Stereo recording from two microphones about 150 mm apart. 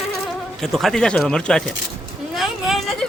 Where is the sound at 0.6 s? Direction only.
Centre (ahead or behind).